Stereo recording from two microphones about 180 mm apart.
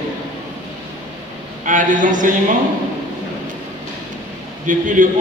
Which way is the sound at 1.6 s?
45° right (ahead or behind).